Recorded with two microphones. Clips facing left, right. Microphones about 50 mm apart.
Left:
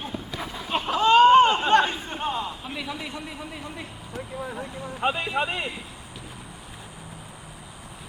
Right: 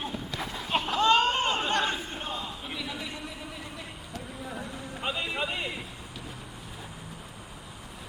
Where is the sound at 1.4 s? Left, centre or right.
Left.